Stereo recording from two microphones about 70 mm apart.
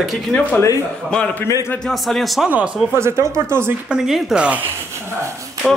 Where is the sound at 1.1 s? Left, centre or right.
Centre.